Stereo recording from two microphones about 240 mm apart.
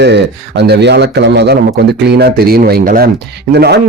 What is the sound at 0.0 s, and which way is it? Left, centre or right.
A man's voice, right.